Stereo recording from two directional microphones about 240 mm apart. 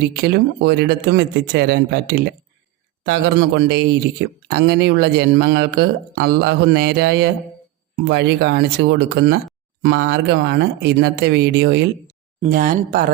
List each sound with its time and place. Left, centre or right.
0.2 s speech: right